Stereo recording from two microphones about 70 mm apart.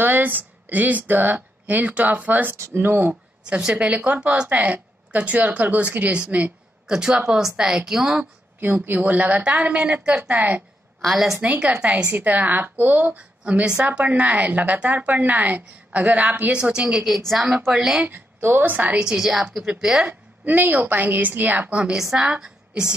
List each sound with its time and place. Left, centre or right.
0.0 s speech: right
2.5 s speech: right
3.4 s a woman's voice: centre
6.9 s speech: centre
8.2 s a woman's voice: right
11.1 s a woman's voice: centre
11.3 s a woman's voice: right
18.0 s a woman's voice: right
19.0 s a woman's voice: centre
20.0 s a woman's voice: right